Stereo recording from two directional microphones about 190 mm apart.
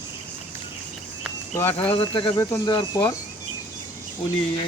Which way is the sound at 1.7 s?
30° left (ahead or behind).